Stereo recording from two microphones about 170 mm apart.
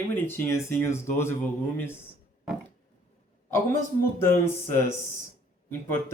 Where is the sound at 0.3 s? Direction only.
15° left (ahead or behind).